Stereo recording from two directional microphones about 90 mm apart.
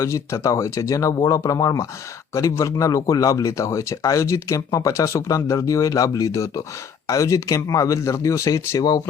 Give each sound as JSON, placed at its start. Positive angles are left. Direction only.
{"t": 0.0, "sound": "speech", "side_deg": 35}